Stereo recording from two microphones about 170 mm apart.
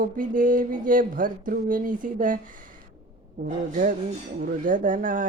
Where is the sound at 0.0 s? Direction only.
55° right (ahead or behind).